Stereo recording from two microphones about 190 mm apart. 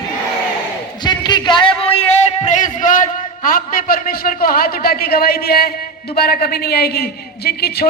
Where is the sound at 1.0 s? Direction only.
25° left (ahead or behind); by 5.7 s 55° left (ahead or behind).